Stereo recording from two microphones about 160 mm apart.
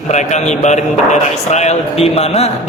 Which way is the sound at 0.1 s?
45° left (ahead or behind).